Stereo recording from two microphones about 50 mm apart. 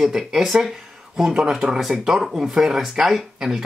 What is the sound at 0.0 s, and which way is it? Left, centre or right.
Speech, centre.